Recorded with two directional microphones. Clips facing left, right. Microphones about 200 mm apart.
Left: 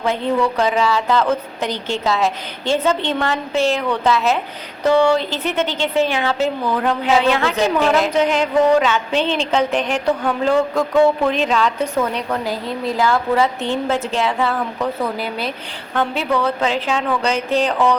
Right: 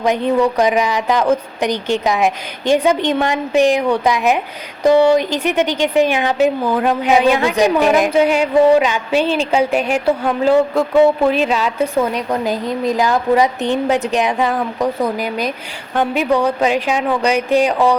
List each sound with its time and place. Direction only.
0.0 s a woman's voice: 15° right (ahead or behind)